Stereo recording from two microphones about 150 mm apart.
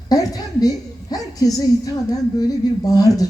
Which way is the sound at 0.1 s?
25° left (ahead or behind).